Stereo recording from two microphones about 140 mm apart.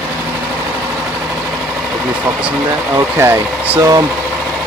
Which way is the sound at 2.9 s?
20° right (ahead or behind).